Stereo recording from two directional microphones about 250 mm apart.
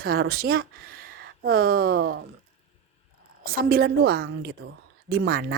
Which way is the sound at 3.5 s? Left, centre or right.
Right.